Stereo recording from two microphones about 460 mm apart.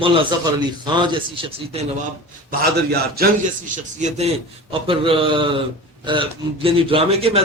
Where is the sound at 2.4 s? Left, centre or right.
Centre.